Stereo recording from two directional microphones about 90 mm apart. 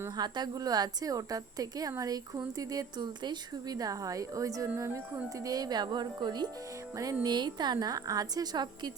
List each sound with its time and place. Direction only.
0.2 s a woman's voice: 50° right (ahead or behind)